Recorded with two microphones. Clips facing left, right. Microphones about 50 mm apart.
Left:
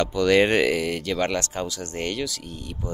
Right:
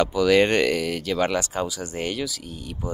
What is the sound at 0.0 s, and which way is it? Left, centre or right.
Speech, centre.